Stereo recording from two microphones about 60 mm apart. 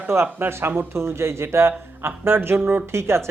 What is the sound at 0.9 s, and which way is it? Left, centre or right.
Speech, right.